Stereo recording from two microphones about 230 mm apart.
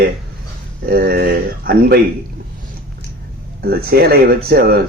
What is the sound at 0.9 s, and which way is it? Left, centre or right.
Speech, right.